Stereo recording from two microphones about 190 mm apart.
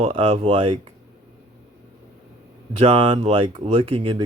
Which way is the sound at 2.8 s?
30° right (ahead or behind).